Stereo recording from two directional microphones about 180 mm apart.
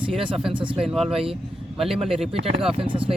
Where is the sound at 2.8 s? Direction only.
30° right (ahead or behind).